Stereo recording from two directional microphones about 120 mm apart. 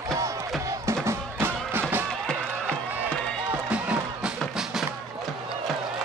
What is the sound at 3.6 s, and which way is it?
Music, 10° right (ahead or behind).